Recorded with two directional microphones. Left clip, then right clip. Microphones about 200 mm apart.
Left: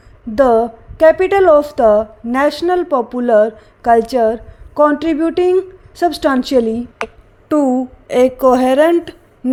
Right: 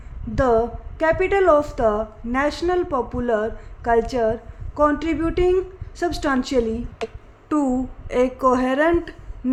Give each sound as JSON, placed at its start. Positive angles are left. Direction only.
{"t": 0.3, "sound": "a woman's voice", "side_deg": 30}
{"t": 7.4, "sound": "a woman's voice", "side_deg": 20}